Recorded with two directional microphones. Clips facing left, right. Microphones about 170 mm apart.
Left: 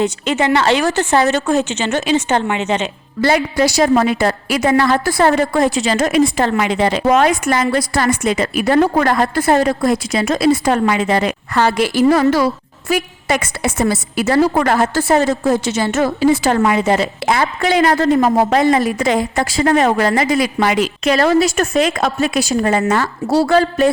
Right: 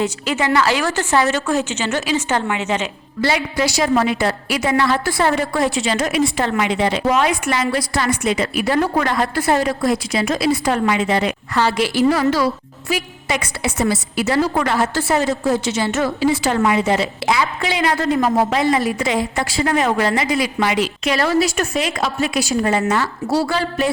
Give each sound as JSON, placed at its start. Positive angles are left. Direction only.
{"t": 0.0, "sound": "a woman's voice", "side_deg": 25}
{"t": 3.2, "sound": "a woman's voice", "side_deg": 50}